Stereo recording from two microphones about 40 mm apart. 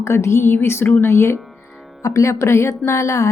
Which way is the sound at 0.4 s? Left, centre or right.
Left.